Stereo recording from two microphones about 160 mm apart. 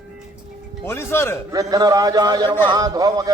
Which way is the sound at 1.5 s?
25° right (ahead or behind).